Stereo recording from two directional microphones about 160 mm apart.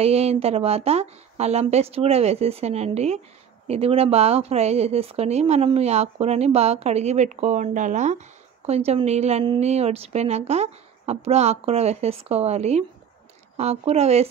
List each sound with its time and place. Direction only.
0.0 s speech: 40° right (ahead or behind)